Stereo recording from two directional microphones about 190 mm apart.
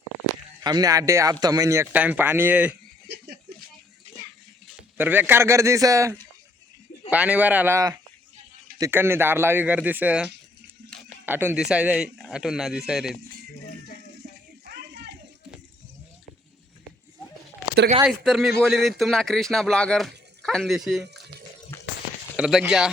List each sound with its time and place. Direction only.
0.6 s speech: 20° right (ahead or behind)
4.8 s speech: 10° right (ahead or behind)
11.3 s speech: 10° right (ahead or behind)
14.6 s a sound: 60° right (ahead or behind)
18.0 s speech: centre (ahead or behind)
21.7 s a sound: 15° left (ahead or behind)
22.4 s speech: 5° right (ahead or behind)